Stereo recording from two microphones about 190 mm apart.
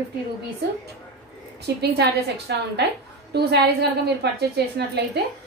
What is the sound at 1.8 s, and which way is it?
A woman's voice, 60° right (ahead or behind).